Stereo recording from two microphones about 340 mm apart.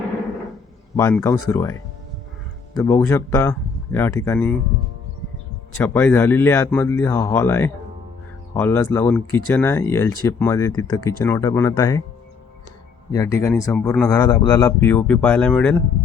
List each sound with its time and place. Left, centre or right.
0.9 s a man's voice: centre
2.7 s a man's voice: centre
5.7 s a man's voice: centre
13.1 s a man's voice: centre